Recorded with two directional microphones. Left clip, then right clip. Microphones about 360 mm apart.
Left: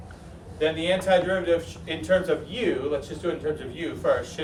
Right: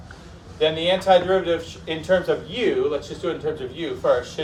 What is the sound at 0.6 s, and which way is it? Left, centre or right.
A man's voice, centre.